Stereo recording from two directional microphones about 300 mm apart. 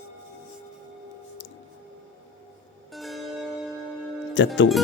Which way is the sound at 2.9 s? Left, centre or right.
Centre.